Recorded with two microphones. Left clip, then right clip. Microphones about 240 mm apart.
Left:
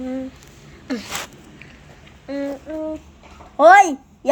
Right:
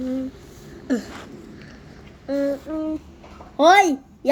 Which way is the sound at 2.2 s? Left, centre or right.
Centre.